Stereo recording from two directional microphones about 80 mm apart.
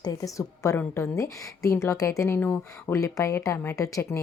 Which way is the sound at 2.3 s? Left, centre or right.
Left.